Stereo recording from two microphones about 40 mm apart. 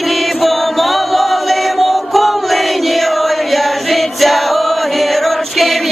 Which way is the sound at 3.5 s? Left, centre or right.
Centre.